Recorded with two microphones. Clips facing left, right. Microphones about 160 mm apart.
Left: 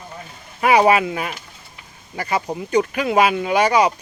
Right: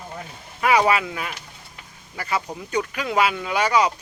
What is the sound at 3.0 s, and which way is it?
Speech, 55° left (ahead or behind).